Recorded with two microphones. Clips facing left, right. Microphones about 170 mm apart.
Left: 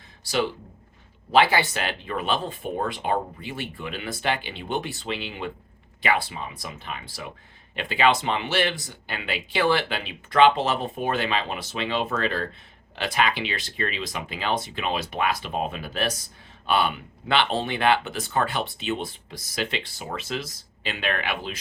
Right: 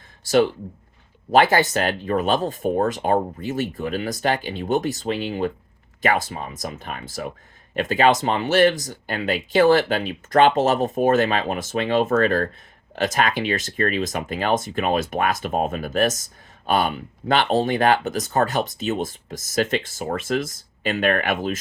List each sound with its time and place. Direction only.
1.3 s speech: 45° right (ahead or behind)